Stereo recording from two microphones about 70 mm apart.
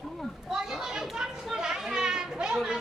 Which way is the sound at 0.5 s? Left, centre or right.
Centre.